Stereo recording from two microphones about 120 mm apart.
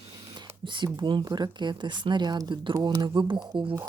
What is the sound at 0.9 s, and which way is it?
Speech, 40° right (ahead or behind).